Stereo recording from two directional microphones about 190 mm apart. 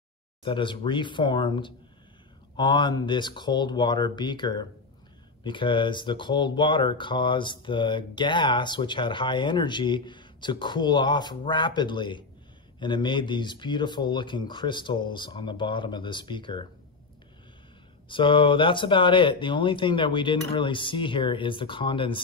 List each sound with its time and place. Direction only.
0.4 s speech: 25° left (ahead or behind)
18.0 s speech: 25° left (ahead or behind)